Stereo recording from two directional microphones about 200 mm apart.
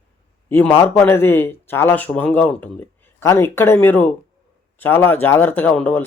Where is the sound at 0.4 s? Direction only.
10° left (ahead or behind).